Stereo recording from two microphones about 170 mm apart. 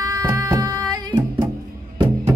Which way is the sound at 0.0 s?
20° right (ahead or behind).